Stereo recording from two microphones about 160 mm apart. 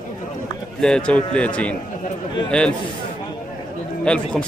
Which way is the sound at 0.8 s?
5° left (ahead or behind).